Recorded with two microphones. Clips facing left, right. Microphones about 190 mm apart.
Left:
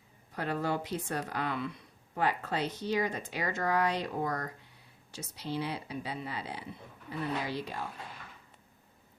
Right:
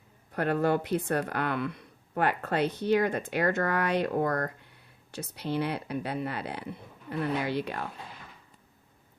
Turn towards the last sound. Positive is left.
turn(degrees=-60)  # may be behind; listen again after turning